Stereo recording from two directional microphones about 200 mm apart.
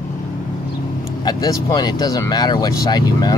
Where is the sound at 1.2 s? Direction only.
20° left (ahead or behind).